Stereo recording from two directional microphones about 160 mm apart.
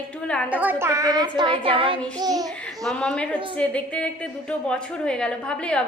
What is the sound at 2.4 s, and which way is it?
A woman's voice, centre (ahead or behind).